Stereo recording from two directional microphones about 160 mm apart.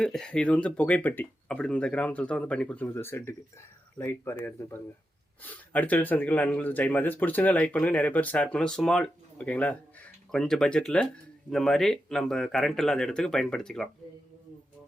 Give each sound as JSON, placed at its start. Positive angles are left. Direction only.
{"t": 0.0, "sound": "speech", "side_deg": 5}
{"t": 5.4, "sound": "speech", "side_deg": 10}